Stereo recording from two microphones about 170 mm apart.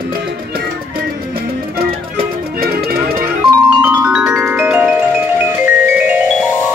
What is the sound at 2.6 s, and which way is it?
Music, 65° right (ahead or behind).